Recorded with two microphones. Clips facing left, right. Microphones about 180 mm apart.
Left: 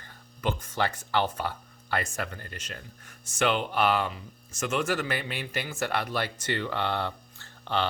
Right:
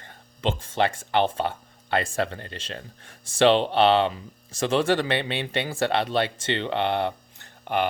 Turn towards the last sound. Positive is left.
turn(degrees=-15)  # may be behind; listen again after turning